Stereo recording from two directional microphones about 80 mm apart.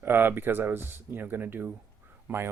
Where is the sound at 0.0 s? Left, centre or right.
Right.